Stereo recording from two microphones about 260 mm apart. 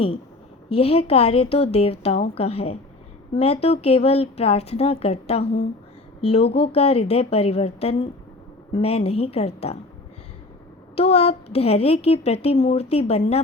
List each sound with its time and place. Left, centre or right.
0.7 s a woman's voice: left
10.9 s a woman's voice: left